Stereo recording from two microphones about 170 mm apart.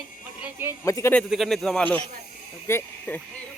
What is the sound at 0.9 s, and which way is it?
Speech, 20° left (ahead or behind).